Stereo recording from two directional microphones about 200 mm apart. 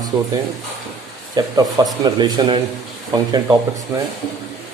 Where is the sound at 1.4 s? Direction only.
20° right (ahead or behind).